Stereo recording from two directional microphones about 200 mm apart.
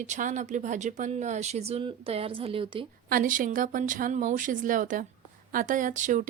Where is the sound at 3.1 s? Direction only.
45° right (ahead or behind).